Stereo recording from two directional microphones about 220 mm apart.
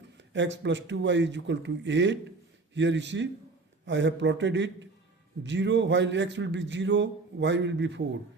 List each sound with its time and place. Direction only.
0.3 s a man's voice: 55° right (ahead or behind)